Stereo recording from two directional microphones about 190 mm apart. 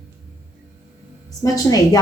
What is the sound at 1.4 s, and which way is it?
Speech, 20° left (ahead or behind).